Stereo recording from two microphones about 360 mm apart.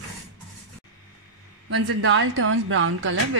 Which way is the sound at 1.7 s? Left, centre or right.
Right.